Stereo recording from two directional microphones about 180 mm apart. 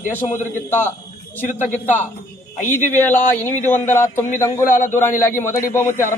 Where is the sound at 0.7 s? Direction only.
10° left (ahead or behind).